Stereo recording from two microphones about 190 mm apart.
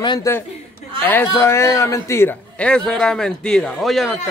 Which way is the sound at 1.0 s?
10° left (ahead or behind).